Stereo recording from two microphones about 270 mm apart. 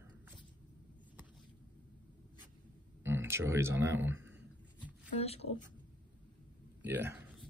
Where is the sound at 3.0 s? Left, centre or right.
Centre.